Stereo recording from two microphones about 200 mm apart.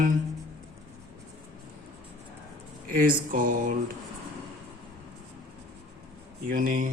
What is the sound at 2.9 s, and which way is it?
Speech, 45° right (ahead or behind).